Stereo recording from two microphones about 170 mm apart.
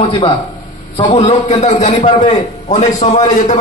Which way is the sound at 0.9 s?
30° left (ahead or behind).